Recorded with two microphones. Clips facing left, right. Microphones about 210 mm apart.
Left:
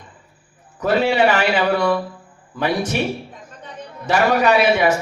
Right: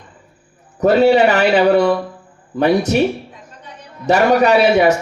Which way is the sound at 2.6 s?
40° right (ahead or behind).